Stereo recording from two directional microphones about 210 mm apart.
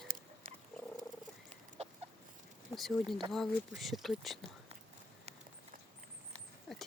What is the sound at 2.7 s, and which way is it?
Speech, centre (ahead or behind).